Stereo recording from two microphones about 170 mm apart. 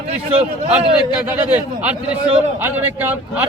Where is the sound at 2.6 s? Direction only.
10° right (ahead or behind).